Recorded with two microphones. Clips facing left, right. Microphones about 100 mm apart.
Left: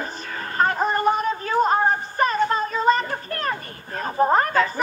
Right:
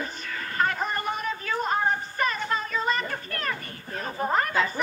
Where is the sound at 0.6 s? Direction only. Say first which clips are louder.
Left 7 dB; 35° left (ahead or behind).